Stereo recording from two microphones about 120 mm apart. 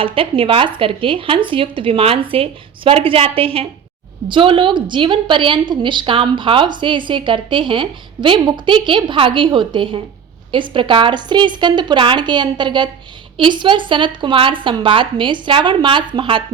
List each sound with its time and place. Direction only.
0.0 s a woman's voice: 50° right (ahead or behind)